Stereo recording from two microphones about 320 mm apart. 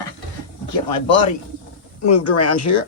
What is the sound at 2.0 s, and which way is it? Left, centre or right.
Speech, left.